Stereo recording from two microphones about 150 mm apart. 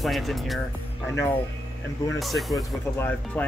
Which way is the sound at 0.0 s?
Centre (ahead or behind).